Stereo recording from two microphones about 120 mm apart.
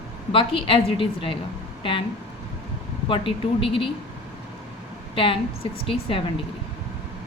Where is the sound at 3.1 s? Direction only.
50° left (ahead or behind).